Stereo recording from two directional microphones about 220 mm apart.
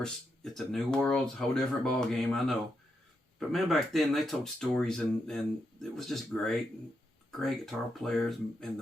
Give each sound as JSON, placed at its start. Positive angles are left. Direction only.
{"t": 0.0, "sound": "speech", "side_deg": 0}